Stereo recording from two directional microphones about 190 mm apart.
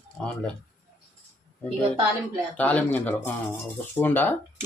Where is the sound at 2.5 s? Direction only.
10° left (ahead or behind).